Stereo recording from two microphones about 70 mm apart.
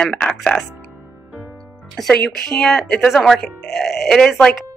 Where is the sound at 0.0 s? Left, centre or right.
Centre.